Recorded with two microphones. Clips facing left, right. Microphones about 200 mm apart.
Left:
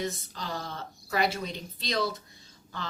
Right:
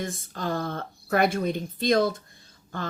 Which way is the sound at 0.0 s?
50° right (ahead or behind).